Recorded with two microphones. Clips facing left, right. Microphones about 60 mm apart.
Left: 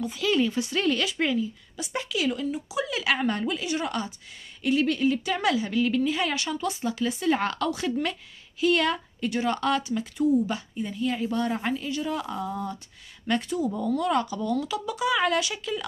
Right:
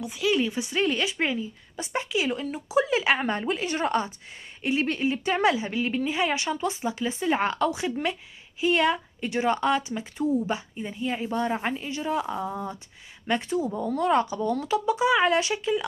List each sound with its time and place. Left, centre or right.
0.0 s speech: centre; by 15.8 s right